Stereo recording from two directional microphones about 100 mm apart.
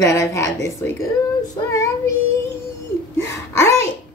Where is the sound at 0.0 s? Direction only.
30° left (ahead or behind).